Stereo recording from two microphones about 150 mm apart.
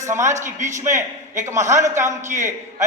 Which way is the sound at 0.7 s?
20° right (ahead or behind).